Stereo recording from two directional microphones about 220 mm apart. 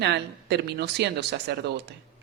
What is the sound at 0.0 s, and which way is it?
Speech, 50° right (ahead or behind).